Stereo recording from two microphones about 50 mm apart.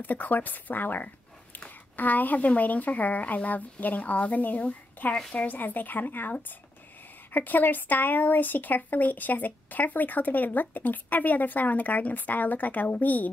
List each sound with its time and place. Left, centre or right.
0.0 s speech: left